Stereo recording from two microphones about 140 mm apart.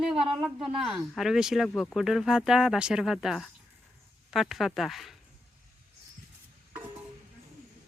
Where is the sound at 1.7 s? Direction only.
10° left (ahead or behind).